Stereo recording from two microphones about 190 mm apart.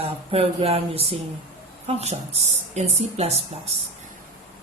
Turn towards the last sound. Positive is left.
turn(degrees=-35)  # may be behind; listen again after turning